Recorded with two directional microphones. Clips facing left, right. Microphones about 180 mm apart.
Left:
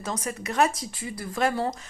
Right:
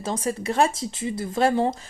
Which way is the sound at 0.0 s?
30° right (ahead or behind).